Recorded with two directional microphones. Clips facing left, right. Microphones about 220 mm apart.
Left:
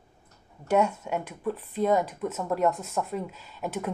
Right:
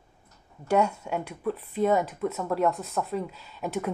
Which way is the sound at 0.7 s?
5° left (ahead or behind).